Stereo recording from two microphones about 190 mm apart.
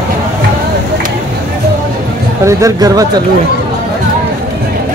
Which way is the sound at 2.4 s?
15° right (ahead or behind).